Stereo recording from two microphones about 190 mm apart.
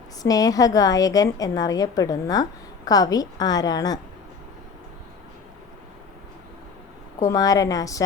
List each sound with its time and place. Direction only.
0.2 s a woman's voice: 20° left (ahead or behind)
7.3 s a woman's voice: 20° left (ahead or behind)